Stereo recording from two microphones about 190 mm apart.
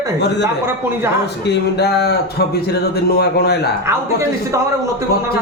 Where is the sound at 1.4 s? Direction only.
60° left (ahead or behind).